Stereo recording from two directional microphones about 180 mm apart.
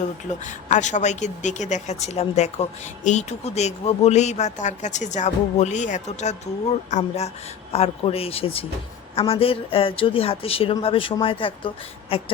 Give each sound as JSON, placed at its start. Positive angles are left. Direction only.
{"t": 0.4, "sound": "speech", "side_deg": 40}